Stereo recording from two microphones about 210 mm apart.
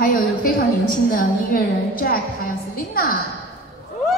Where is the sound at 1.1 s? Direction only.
40° left (ahead or behind).